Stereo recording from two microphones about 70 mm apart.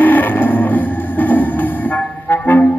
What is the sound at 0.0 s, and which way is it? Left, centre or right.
Music, left.